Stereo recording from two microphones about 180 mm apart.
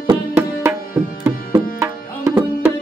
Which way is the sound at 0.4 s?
10° right (ahead or behind).